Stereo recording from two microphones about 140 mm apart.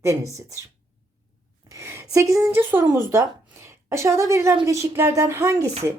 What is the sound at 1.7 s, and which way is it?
Speech, 20° right (ahead or behind).